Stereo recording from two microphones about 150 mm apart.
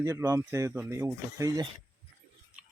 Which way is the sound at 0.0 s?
20° right (ahead or behind).